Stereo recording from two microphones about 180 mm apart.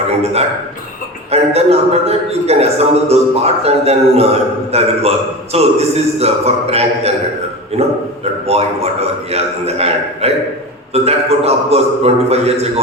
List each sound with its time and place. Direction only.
1.3 s a man's voice: 35° right (ahead or behind)